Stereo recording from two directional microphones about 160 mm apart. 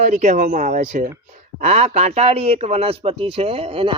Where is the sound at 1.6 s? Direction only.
45° right (ahead or behind).